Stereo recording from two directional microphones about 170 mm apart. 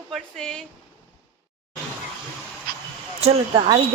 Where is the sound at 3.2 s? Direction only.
35° right (ahead or behind).